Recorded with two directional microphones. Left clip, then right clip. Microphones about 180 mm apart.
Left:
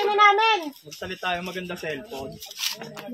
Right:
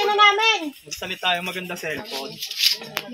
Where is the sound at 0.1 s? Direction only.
35° left (ahead or behind).